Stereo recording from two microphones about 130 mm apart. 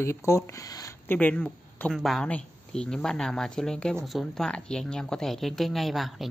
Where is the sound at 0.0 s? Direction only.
20° left (ahead or behind).